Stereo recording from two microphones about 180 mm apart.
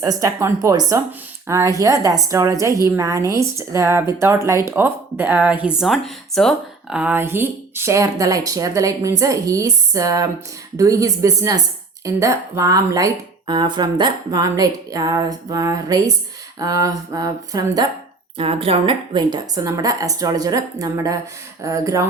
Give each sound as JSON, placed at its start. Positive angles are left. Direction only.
{"t": 0.0, "sound": "speech", "side_deg": -20}
{"t": 18.3, "sound": "speech", "side_deg": -30}